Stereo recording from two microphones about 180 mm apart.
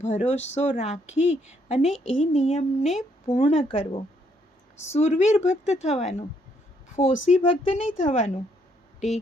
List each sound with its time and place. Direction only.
0.0 s speech: 40° left (ahead or behind)